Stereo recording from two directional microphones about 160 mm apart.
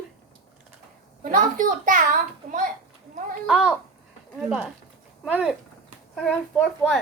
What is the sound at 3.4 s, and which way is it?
A child's voice, 5° right (ahead or behind).